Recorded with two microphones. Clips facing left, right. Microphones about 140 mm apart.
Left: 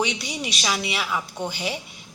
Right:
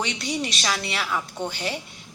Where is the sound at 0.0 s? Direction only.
5° left (ahead or behind).